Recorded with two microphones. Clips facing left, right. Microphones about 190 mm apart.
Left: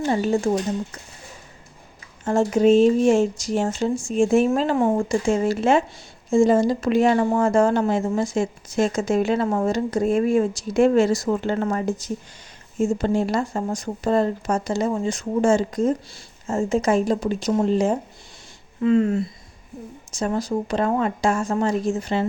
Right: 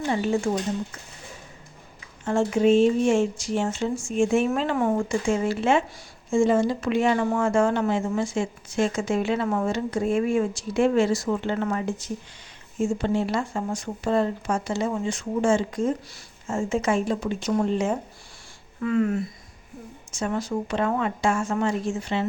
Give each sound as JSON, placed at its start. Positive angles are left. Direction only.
{"t": 0.0, "sound": "speech", "side_deg": 35}
{"t": 2.2, "sound": "speech", "side_deg": 40}
{"t": 17.5, "sound": "speech", "side_deg": 25}
{"t": 18.8, "sound": "speech", "side_deg": 25}